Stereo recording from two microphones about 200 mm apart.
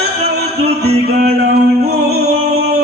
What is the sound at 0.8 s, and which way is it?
Music, 55° right (ahead or behind).